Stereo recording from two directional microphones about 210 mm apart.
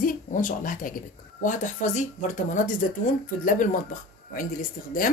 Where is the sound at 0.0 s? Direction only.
40° left (ahead or behind).